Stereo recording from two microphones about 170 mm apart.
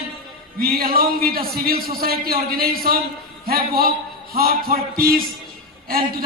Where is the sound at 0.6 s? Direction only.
60° right (ahead or behind).